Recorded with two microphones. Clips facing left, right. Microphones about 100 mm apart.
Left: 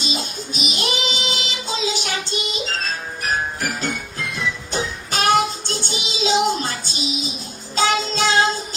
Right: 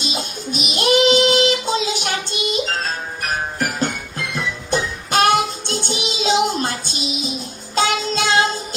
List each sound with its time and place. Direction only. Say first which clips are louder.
0.0 s music: right 1 dB; 50° right (ahead or behind)
3.2 s music: even; 50° right (ahead or behind)
7.8 s child singing: even; 50° right (ahead or behind)